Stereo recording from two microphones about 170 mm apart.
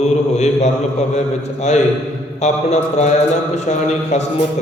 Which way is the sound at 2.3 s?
40° left (ahead or behind).